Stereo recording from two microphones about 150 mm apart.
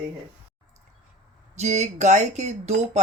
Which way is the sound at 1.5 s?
50° right (ahead or behind).